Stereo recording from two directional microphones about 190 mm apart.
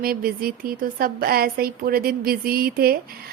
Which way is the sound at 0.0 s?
50° right (ahead or behind).